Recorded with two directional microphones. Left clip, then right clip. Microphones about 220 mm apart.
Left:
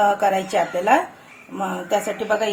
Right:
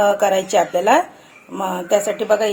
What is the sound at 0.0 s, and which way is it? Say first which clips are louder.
A woman's voice: right 2 dB; 40° right (ahead or behind).